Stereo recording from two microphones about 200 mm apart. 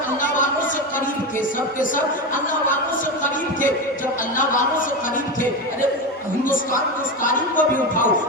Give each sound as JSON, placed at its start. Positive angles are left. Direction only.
{"t": 7.5, "sound": "a man's voice", "side_deg": 40}